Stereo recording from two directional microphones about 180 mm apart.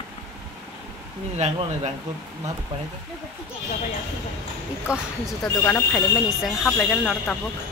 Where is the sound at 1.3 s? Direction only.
35° right (ahead or behind).